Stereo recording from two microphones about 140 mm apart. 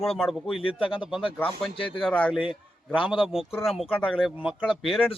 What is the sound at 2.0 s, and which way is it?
Speech, 10° left (ahead or behind).